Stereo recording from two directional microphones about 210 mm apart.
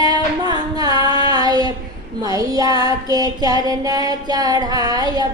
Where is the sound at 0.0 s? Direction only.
20° right (ahead or behind).